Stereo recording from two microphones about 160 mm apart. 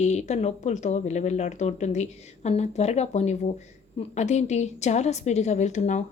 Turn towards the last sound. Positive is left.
turn(degrees=45)  # may be behind; listen again after turning